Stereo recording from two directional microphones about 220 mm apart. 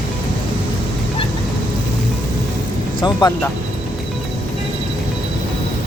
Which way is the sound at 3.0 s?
15° left (ahead or behind).